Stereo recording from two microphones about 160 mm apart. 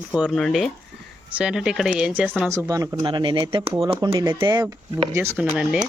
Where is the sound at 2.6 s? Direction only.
20° right (ahead or behind).